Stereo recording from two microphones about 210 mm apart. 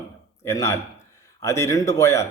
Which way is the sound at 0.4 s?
15° left (ahead or behind).